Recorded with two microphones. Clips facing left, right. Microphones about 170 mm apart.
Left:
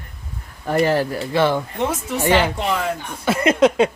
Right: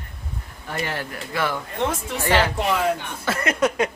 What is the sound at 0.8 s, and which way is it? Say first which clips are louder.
Speech: left 11 dB; 35° left (ahead or behind).